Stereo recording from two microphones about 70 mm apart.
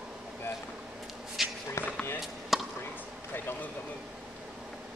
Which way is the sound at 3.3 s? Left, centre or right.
Left.